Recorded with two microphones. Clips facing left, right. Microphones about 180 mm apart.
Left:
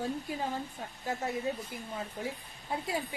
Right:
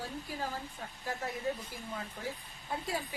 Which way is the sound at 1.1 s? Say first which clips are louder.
Left 3 dB; 25° left (ahead or behind).